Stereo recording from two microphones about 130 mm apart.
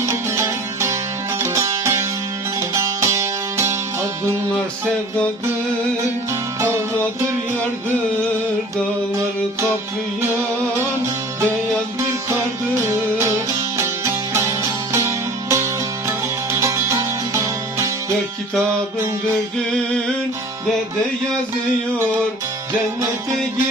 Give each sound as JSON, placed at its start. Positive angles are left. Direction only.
{"t": 0.0, "sound": "music", "side_deg": -20}
{"t": 12.8, "sound": "music", "side_deg": -20}